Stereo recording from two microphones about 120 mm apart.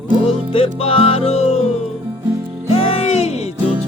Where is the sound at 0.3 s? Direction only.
50° left (ahead or behind).